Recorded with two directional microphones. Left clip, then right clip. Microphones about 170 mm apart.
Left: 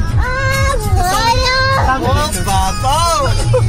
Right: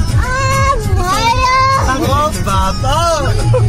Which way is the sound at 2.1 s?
10° right (ahead or behind).